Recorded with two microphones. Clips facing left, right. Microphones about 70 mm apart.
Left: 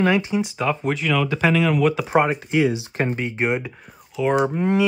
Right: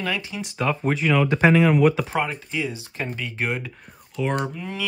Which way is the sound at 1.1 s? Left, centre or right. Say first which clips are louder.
Right 2 dB; centre.